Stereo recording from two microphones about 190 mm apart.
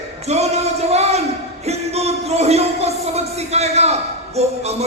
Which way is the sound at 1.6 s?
35° right (ahead or behind).